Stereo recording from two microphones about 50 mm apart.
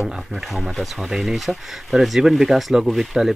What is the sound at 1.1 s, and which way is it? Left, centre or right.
Speech, centre.